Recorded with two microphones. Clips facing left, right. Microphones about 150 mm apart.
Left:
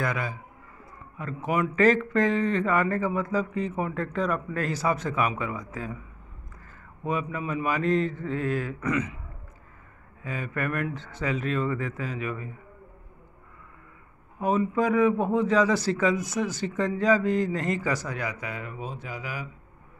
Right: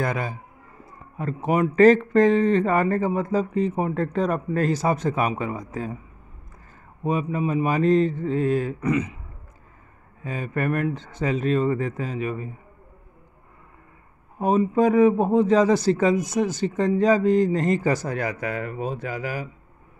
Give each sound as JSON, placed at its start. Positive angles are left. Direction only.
{"t": 0.0, "sound": "speech", "side_deg": -35}
{"t": 1.4, "sound": "speech", "side_deg": -35}
{"t": 7.1, "sound": "mantra", "side_deg": -30}
{"t": 10.2, "sound": "speech", "side_deg": -30}
{"t": 11.1, "sound": "mantra", "side_deg": -25}
{"t": 14.4, "sound": "mantra", "side_deg": -30}
{"t": 18.0, "sound": "speech", "side_deg": -50}
{"t": 19.2, "sound": "speech", "side_deg": -45}